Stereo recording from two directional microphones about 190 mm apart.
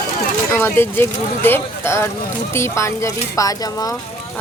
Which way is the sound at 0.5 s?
10° left (ahead or behind).